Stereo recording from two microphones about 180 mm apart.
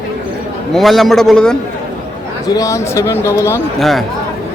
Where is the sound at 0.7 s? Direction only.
Centre (ahead or behind).